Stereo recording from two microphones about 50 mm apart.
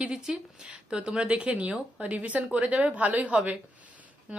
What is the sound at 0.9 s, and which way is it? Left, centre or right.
A woman's voice, centre.